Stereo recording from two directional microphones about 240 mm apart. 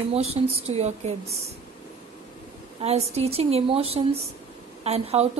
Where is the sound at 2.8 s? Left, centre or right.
Right.